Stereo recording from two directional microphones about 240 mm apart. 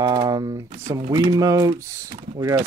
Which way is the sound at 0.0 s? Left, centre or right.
Centre.